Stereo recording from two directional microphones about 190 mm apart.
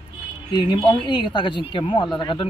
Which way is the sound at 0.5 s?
20° left (ahead or behind).